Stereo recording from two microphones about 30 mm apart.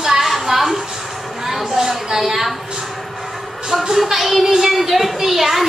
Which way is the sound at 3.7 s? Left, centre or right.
Centre.